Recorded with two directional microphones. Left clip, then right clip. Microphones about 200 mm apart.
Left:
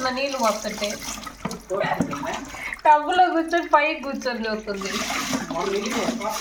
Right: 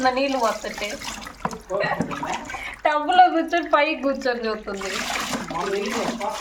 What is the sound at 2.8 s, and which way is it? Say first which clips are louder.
Speech: even; 55° right (ahead or behind).